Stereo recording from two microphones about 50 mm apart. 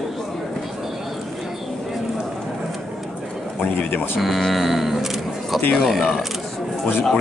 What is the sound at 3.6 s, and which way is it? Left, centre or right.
Speech, left.